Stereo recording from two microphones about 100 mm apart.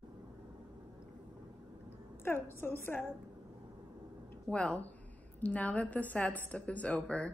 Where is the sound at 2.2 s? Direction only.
25° left (ahead or behind).